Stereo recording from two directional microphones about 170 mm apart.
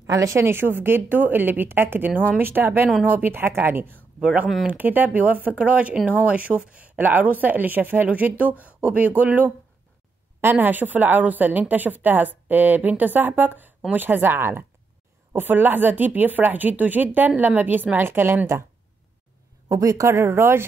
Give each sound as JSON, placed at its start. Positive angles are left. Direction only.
{"t": 0.0, "sound": "speech", "side_deg": -15}
{"t": 19.7, "sound": "speech", "side_deg": -20}